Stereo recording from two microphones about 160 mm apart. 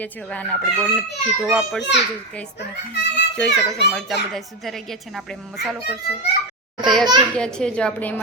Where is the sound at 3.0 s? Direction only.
90° left.